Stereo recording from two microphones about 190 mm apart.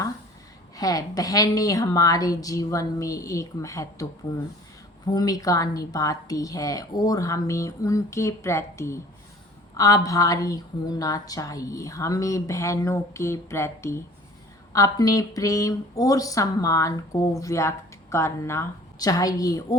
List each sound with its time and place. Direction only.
0.8 s a woman's voice: 20° left (ahead or behind)
5.0 s speech: 20° left (ahead or behind)